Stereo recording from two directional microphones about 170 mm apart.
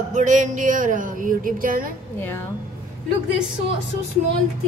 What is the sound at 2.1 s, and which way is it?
Speech, 10° left (ahead or behind).